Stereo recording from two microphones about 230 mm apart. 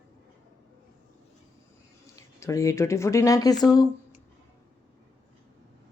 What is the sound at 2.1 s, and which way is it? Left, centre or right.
Speech, centre.